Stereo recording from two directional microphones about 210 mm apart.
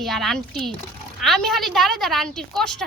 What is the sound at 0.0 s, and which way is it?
Speech, centre (ahead or behind).